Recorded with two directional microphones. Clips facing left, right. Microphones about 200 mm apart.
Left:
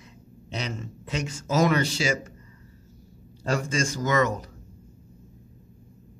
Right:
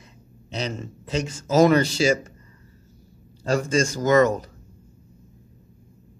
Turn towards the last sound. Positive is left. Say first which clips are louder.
# right 6 dB
turn(degrees=-40)  # may be behind; listen again after turning